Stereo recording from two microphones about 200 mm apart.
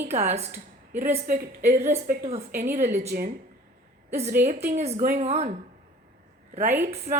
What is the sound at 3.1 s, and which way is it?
Speech, 45° right (ahead or behind).